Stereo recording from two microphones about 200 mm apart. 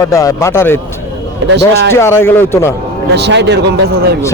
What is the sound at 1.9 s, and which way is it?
Speech, 10° left (ahead or behind).